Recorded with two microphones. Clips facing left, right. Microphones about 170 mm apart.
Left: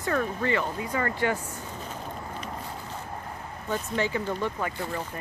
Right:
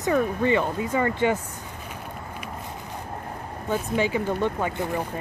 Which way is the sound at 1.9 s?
10° right (ahead or behind).